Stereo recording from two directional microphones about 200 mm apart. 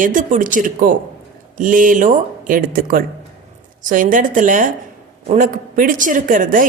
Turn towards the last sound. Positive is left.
turn(degrees=-45)  # may be behind; listen again after turning